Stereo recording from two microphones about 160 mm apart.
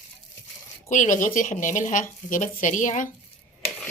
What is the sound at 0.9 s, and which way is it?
Speech, 55° left (ahead or behind).